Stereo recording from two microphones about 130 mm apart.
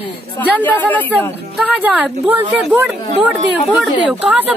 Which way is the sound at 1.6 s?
10° right (ahead or behind).